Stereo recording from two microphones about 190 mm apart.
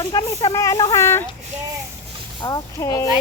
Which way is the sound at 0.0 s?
25° left (ahead or behind).